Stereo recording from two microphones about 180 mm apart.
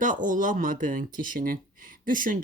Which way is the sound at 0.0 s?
45° right (ahead or behind).